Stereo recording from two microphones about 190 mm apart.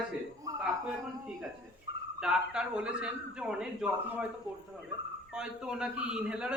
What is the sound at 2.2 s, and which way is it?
Speech, 5° right (ahead or behind).